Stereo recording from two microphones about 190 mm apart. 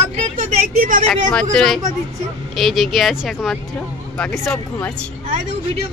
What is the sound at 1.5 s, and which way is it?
Speech, 5° left (ahead or behind).